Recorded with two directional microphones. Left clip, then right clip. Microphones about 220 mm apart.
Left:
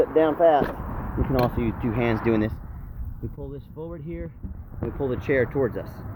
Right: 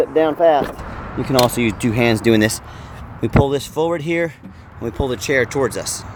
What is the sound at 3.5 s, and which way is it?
Speech, 35° right (ahead or behind).